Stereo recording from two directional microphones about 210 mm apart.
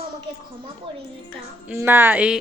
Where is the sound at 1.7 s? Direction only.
10° right (ahead or behind).